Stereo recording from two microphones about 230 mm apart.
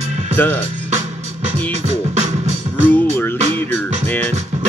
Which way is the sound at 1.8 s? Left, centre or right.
Right.